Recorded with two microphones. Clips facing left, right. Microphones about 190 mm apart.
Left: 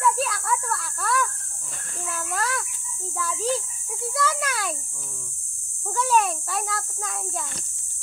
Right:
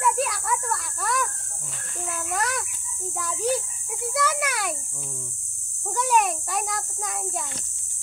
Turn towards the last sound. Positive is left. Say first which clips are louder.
# even
turn(degrees=-15)  # may be behind; listen again after turning